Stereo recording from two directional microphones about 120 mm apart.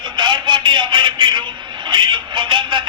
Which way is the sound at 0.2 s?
40° right (ahead or behind).